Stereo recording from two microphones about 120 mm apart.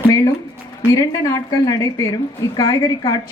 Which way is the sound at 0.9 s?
25° left (ahead or behind).